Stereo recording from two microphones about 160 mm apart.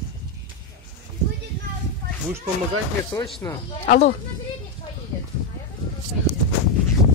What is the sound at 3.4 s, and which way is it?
Speech, 15° left (ahead or behind).